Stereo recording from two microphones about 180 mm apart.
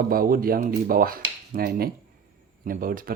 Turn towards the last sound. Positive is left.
turn(degrees=-50)  # may be behind; listen again after turning